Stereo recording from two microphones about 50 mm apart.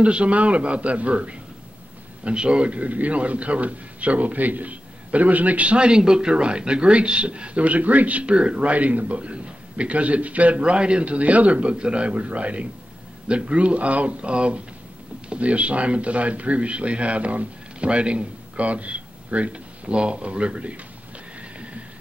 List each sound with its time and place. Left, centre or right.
0.0 s a man's voice: right